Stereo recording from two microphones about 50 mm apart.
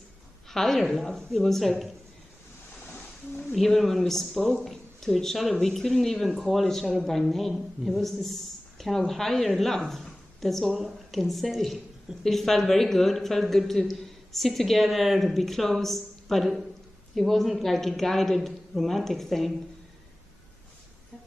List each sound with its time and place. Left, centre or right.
0.5 s speech: centre
2.9 s a sound: left
3.5 s speech: centre